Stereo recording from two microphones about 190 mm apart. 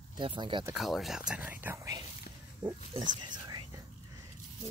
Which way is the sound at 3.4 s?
20° right (ahead or behind).